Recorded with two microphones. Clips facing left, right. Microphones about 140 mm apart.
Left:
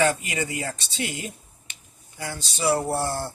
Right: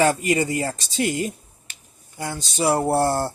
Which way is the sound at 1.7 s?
50° right (ahead or behind).